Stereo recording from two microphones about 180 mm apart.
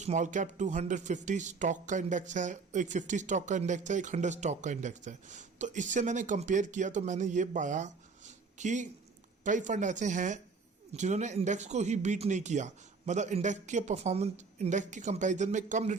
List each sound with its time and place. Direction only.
0.0 s speech: 40° right (ahead or behind)